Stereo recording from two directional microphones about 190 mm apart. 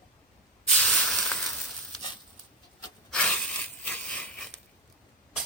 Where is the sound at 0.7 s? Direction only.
5° left (ahead or behind).